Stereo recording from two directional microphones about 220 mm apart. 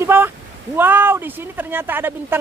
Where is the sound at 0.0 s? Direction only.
10° right (ahead or behind).